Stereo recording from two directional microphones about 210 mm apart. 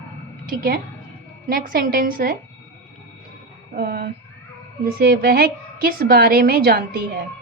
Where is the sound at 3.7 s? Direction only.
50° right (ahead or behind).